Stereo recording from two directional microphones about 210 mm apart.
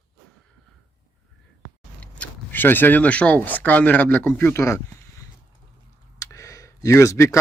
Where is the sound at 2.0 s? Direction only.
5° left (ahead or behind).